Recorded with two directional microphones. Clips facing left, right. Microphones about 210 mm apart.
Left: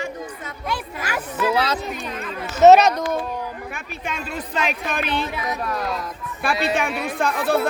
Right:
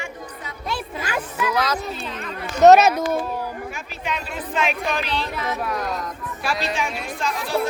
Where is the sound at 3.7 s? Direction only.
50° left (ahead or behind).